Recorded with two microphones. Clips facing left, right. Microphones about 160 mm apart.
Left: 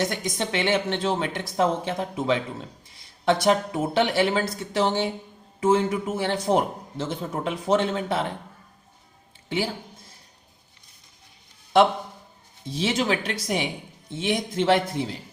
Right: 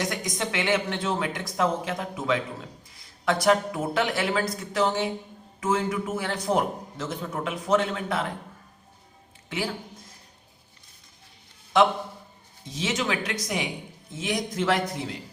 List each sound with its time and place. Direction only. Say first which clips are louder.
0.0 s a man's voice: left 3 dB; 30° left (ahead or behind)
12.6 s a man's voice: left 4 dB; 30° left (ahead or behind)